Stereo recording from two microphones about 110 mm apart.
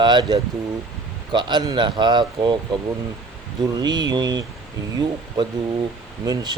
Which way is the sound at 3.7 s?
40° right (ahead or behind).